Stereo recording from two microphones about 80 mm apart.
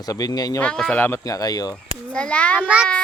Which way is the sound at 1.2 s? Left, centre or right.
Left.